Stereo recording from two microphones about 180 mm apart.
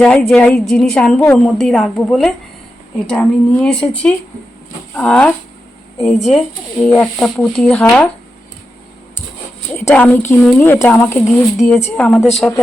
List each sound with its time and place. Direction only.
0.0 s a woman's voice: 5° left (ahead or behind)
6.1 s speech: 40° left (ahead or behind)
6.3 s a woman's voice: 10° left (ahead or behind)
9.7 s a woman's voice: 10° left (ahead or behind)